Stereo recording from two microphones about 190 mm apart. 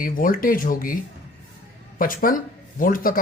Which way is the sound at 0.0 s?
45° left (ahead or behind).